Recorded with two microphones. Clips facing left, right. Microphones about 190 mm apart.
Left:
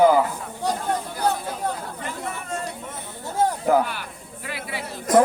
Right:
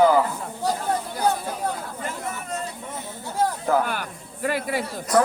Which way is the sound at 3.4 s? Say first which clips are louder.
Left 2 dB; 15° left (ahead or behind).